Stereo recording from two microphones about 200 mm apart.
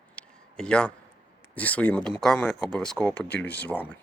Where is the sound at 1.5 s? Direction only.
5° left (ahead or behind).